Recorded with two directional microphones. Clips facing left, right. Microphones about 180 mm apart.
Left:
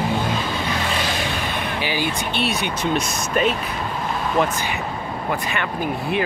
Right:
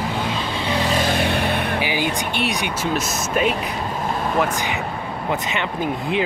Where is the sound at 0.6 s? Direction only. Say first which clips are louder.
Right 3 dB; 35° right (ahead or behind).